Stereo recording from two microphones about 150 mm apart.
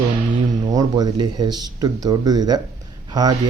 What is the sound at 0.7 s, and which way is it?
Speech, 25° right (ahead or behind).